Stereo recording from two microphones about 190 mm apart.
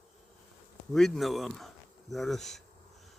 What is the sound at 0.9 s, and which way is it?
Speech, centre (ahead or behind).